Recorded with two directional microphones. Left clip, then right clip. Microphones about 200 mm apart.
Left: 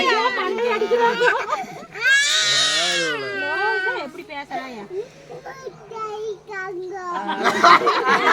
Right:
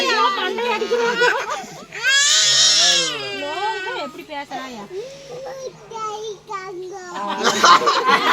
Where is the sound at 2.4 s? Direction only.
10° left (ahead or behind).